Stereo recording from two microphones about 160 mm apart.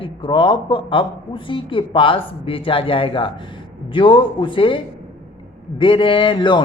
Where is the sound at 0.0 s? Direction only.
30° left (ahead or behind).